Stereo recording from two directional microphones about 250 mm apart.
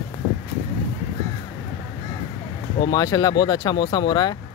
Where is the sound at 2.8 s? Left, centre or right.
Centre.